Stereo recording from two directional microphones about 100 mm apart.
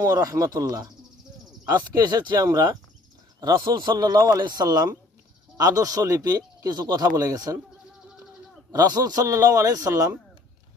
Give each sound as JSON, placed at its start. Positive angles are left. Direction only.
{"t": 0.0, "sound": "speech", "side_deg": -35}
{"t": 2.0, "sound": "speech", "side_deg": -40}
{"t": 8.7, "sound": "speech", "side_deg": -40}